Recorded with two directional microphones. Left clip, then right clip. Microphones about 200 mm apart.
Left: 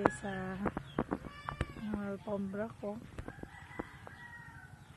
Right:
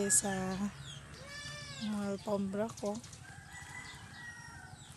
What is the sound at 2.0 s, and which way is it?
Speech, 10° right (ahead or behind).